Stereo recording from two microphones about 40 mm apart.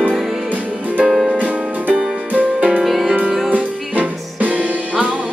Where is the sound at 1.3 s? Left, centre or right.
Right.